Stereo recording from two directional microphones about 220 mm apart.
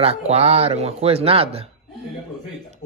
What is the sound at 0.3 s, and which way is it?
Speech, 30° right (ahead or behind).